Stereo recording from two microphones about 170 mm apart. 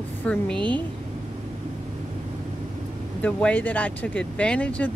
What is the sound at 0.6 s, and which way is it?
Speech, 30° right (ahead or behind).